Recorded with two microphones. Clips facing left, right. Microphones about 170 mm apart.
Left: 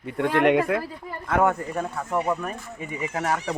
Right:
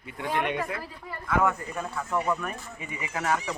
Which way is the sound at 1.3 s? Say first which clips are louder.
Left 4 dB; 55° left (ahead or behind).